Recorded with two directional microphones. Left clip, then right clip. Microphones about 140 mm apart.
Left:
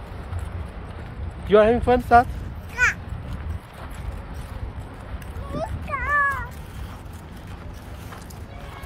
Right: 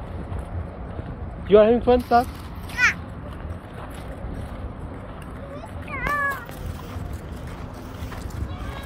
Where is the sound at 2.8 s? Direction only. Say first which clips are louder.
Right 1 dB; 20° left (ahead or behind).